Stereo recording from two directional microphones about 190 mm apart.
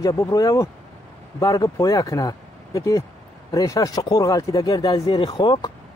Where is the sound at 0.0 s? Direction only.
15° left (ahead or behind).